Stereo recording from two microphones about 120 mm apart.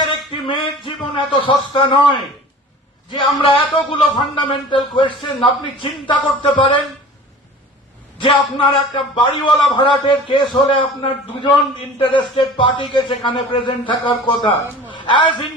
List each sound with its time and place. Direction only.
0.0 s a man's voice: 45° left (ahead or behind)
8.2 s a man's voice: 45° left (ahead or behind)